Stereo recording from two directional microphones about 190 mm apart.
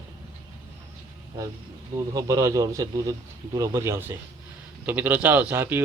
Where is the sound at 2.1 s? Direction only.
20° right (ahead or behind).